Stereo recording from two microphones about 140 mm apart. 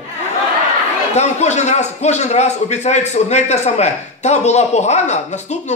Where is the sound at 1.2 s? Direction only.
55° left (ahead or behind).